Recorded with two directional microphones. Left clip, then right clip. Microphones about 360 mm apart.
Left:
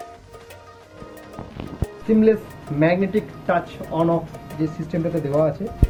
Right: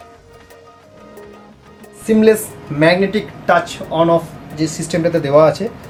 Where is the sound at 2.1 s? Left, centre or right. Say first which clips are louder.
Right 6 dB; centre.